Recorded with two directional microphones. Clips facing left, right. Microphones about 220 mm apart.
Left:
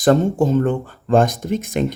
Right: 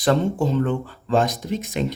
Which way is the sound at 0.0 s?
45° left (ahead or behind).